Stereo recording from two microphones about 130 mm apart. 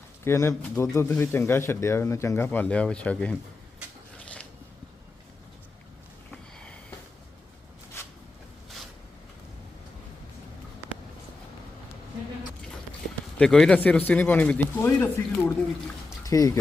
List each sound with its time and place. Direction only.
0.3 s speech: 20° left (ahead or behind)
6.3 s sniff: 10° left (ahead or behind)
13.4 s speech: 5° left (ahead or behind)
16.0 s pour: 25° left (ahead or behind)